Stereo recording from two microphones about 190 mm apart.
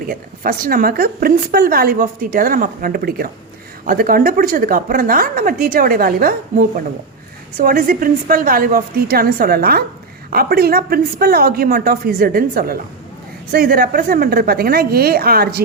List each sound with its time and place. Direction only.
0.1 s speech: 50° right (ahead or behind)